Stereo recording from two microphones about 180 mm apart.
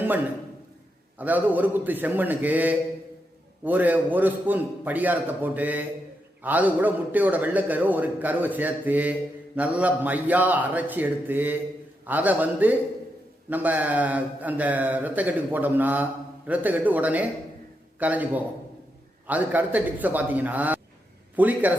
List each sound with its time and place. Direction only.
1.2 s a man's voice: 10° right (ahead or behind)